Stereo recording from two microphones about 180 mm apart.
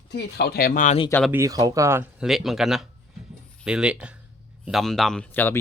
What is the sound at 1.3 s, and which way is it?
Speech, 20° right (ahead or behind).